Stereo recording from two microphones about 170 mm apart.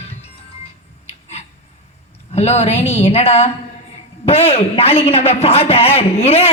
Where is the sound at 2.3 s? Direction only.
40° left (ahead or behind).